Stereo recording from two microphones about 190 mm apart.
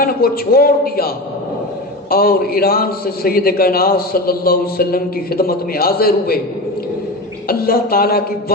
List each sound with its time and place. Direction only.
0.0 s a man's voice: 50° left (ahead or behind)
7.4 s a man's voice: 50° left (ahead or behind)